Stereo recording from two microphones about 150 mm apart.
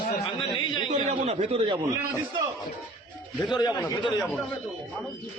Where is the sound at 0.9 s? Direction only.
45° right (ahead or behind).